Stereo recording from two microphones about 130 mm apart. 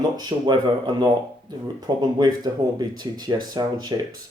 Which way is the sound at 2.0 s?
30° right (ahead or behind).